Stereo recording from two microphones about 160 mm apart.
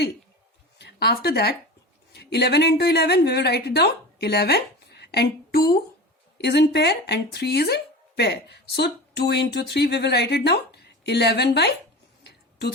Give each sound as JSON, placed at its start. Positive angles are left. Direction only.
{"t": 0.8, "sound": "a woman's voice", "side_deg": 90}
{"t": 6.4, "sound": "speech", "side_deg": 90}
{"t": 12.2, "sound": "a sound", "side_deg": 90}